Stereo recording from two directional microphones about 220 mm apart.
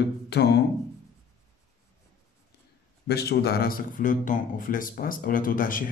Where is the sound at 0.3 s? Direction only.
50° left (ahead or behind).